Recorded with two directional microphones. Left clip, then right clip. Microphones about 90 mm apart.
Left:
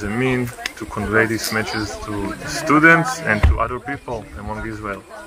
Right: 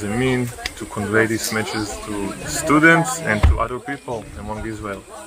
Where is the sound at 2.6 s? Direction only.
10° right (ahead or behind).